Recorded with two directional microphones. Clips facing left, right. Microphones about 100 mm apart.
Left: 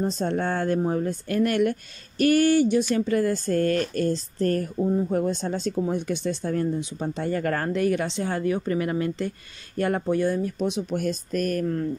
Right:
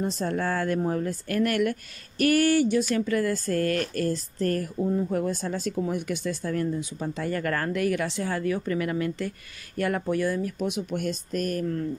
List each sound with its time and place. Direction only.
0.0 s speech: 25° left (ahead or behind); by 11.8 s 45° left (ahead or behind)